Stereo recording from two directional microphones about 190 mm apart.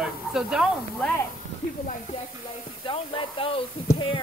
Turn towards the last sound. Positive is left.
turn(degrees=30)  # may be behind; listen again after turning